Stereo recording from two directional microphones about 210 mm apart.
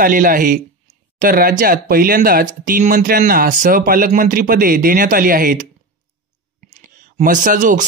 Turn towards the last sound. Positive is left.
turn(degrees=-40)  # may be behind; listen again after turning